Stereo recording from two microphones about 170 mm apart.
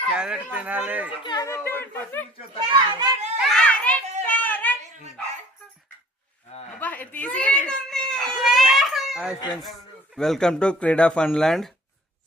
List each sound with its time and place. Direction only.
0.1 s speech: 5° right (ahead or behind)
1.2 s speech: 25° left (ahead or behind)
2.6 s a child's voice: 25° right (ahead or behind)
3.5 s children playing: 5° left (ahead or behind)
4.3 s a sound: 10° left (ahead or behind)
6.7 s baby cry: 10° left (ahead or behind)
9.6 s speech: centre (ahead or behind)